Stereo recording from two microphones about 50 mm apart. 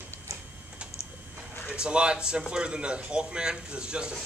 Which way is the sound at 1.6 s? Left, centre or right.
Centre.